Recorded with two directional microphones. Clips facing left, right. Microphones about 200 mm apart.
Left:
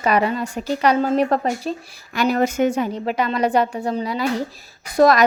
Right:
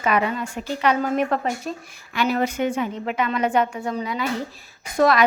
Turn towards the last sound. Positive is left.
turn(degrees=40)  # may be behind; listen again after turning